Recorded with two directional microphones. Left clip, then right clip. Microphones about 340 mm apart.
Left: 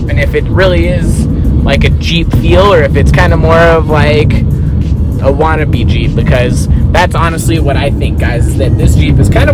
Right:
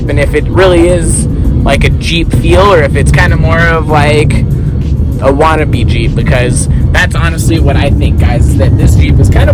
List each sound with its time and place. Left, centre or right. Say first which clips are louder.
0.2 s speech: right 2 dB; centre
6.9 s speech: left 2 dB; centre